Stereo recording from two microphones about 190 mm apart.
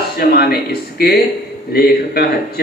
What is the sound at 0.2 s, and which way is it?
A man's voice, 55° left (ahead or behind).